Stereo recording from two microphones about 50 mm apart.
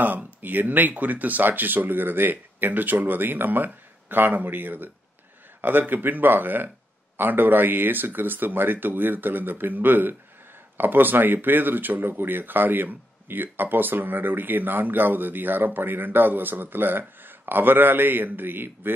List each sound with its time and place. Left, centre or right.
0.0 s a man's voice: right